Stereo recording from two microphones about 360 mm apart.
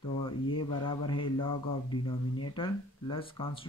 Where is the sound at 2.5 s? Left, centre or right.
Centre.